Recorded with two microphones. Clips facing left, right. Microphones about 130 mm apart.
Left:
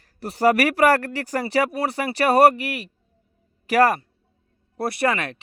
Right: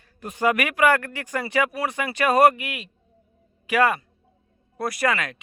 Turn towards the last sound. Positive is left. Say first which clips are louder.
# left 2 dB
turn(degrees=30)  # may be behind; listen again after turning